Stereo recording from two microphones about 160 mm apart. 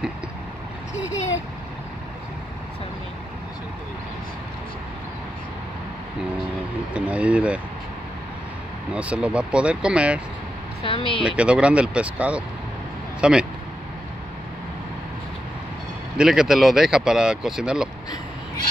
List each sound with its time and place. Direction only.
6.9 s speech: 10° right (ahead or behind)
8.9 s speech: 5° right (ahead or behind)
10.8 s speech: 35° left (ahead or behind)
11.2 s speech: 5° right (ahead or behind)
16.2 s speech: 5° right (ahead or behind)